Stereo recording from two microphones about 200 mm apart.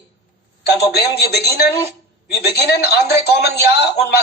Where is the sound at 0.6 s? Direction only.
55° left (ahead or behind).